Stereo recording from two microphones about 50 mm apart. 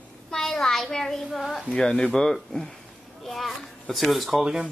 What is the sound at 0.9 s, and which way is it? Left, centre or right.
Speech, centre.